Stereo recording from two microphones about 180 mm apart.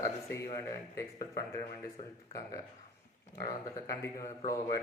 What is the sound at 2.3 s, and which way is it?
A man's voice, 20° left (ahead or behind).